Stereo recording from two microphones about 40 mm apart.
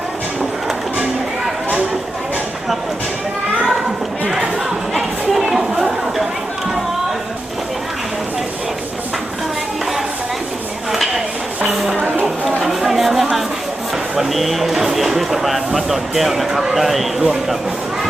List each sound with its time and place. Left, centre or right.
4.9 s chatter: centre
10.9 s chopping: centre
12.6 s a sound: centre